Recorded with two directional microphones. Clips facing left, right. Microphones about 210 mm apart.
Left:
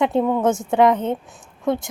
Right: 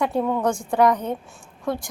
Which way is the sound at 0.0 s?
20° left (ahead or behind).